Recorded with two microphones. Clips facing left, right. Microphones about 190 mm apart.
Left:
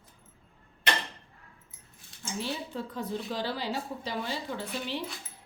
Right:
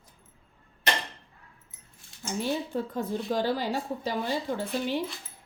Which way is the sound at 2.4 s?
45° right (ahead or behind).